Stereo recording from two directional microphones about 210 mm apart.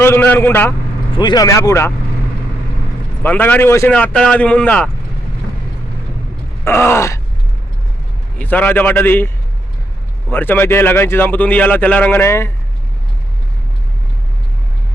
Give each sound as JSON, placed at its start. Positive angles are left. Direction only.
{"t": 0.0, "sound": "a man's voice", "side_deg": 10}
{"t": 3.2, "sound": "a man's voice", "side_deg": 10}
{"t": 6.7, "sound": "a man's voice", "side_deg": 10}
{"t": 8.4, "sound": "a man's voice", "side_deg": 10}